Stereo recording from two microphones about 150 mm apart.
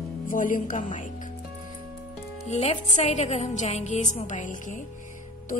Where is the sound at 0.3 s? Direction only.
65° left (ahead or behind).